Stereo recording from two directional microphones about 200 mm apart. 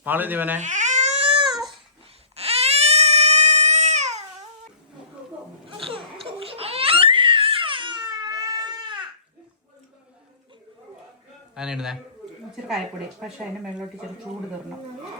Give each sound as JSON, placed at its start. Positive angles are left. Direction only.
{"t": 0.0, "sound": "speech", "side_deg": -10}
{"t": 0.6, "sound": "baby cry", "side_deg": -35}
{"t": 2.3, "sound": "baby cry", "side_deg": -30}
{"t": 5.6, "sound": "crying", "side_deg": -25}
{"t": 11.5, "sound": "a sound", "side_deg": -5}
{"t": 12.6, "sound": "speech", "side_deg": 0}